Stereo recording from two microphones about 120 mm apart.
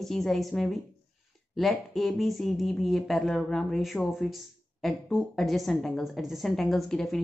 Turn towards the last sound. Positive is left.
turn(degrees=5)  # may be behind; listen again after turning